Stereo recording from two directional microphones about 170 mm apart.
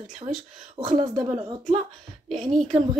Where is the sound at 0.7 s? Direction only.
25° right (ahead or behind).